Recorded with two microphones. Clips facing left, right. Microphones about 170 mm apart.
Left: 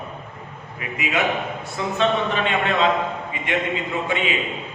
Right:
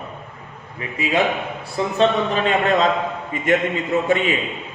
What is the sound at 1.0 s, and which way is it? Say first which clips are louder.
Speech: right 3 dB; 35° right (ahead or behind).